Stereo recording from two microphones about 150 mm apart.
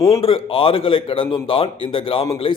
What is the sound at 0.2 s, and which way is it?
A man's voice, 35° left (ahead or behind).